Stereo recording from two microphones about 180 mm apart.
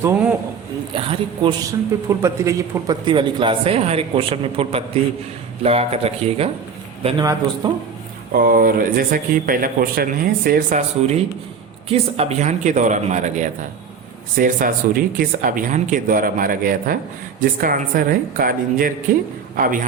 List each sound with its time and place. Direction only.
0.0 s speech: 5° right (ahead or behind)
0.9 s a man's voice: 30° right (ahead or behind)
2.0 s a man's voice: 15° right (ahead or behind); by 6.5 s 35° right (ahead or behind)
7.2 s a man's voice: 20° right (ahead or behind)
8.3 s speech: 55° right (ahead or behind)
12.1 s speech: 35° right (ahead or behind)